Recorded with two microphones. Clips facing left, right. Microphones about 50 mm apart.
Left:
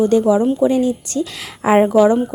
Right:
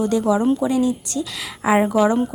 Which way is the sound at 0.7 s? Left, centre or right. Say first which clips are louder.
Left 3 dB; left.